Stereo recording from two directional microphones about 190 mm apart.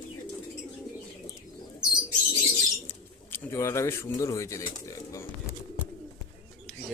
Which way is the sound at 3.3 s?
15° left (ahead or behind).